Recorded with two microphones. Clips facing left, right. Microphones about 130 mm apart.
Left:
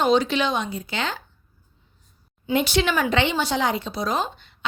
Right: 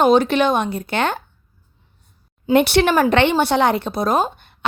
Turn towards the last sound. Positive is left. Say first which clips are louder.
# right 7 dB
turn(degrees=-55)  # may be behind; listen again after turning